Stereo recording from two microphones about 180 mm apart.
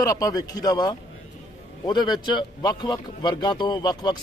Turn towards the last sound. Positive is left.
turn(degrees=25)  # may be behind; listen again after turning